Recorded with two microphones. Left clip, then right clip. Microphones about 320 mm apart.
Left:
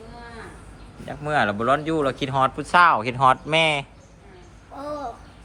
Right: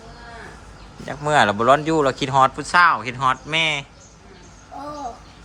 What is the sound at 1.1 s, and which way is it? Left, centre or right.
Speech, centre.